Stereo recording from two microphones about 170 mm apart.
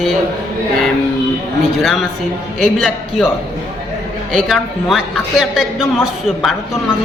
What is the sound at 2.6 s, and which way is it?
Speech, 5° left (ahead or behind).